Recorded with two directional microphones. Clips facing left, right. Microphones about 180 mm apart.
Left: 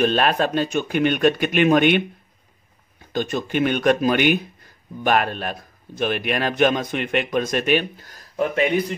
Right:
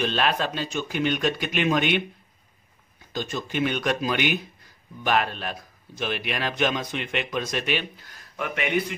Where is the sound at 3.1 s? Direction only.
55° left (ahead or behind).